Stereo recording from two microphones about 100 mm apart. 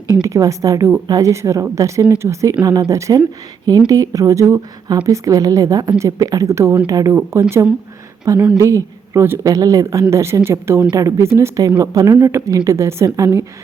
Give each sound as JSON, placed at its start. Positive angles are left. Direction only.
{"t": 0.1, "sound": "speech", "side_deg": -30}
{"t": 7.1, "sound": "a woman's voice", "side_deg": -25}
{"t": 8.5, "sound": "a woman's voice", "side_deg": -30}